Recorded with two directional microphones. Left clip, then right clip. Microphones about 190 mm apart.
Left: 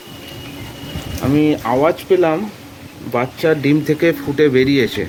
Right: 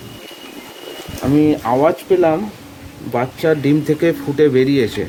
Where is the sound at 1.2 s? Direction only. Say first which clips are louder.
Right 1 dB; 15° right (ahead or behind).